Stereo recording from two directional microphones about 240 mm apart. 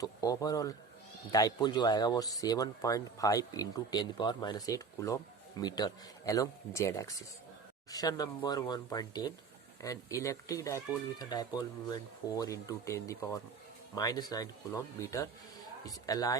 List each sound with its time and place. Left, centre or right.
0.0 s speech: centre